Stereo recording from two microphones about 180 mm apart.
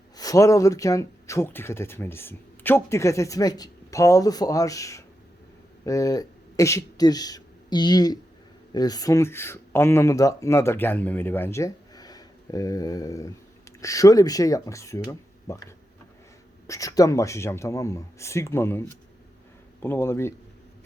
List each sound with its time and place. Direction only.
0.2 s speech: 20° left (ahead or behind)